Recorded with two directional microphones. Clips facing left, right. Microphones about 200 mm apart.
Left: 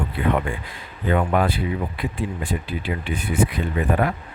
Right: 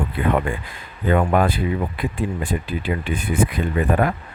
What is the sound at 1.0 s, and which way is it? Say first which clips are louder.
Speech: right 2 dB; 50° right (ahead or behind).